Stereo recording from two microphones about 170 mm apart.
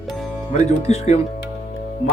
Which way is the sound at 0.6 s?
40° left (ahead or behind).